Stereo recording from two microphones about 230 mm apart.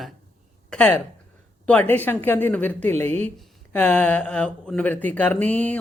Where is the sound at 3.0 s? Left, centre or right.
Right.